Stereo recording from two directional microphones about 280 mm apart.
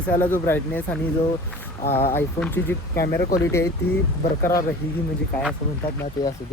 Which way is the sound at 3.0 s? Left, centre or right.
Left.